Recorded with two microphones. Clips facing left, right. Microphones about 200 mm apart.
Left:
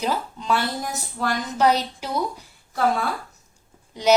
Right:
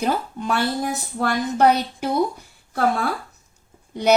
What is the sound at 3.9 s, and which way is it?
Speech, 55° right (ahead or behind).